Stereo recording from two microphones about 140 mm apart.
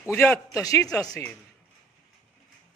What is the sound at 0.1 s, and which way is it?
Speech, 15° left (ahead or behind).